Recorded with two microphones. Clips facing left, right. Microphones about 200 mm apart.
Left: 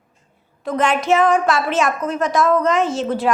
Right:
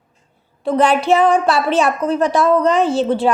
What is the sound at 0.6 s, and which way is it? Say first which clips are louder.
A woman's voice: right 4 dB; 35° right (ahead or behind).